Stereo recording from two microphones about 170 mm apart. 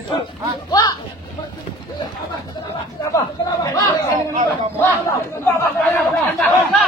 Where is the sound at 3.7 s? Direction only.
20° left (ahead or behind).